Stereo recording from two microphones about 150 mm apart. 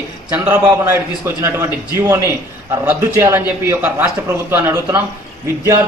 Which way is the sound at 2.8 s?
15° right (ahead or behind).